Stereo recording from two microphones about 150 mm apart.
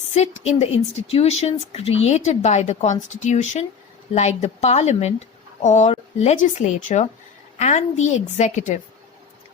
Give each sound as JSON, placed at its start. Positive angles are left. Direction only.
{"t": 0.1, "sound": "speech", "side_deg": 45}